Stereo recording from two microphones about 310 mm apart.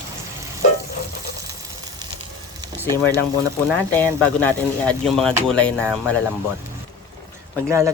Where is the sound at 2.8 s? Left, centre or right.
Centre.